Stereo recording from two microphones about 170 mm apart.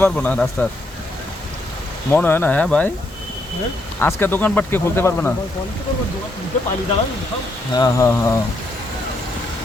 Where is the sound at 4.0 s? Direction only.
15° left (ahead or behind).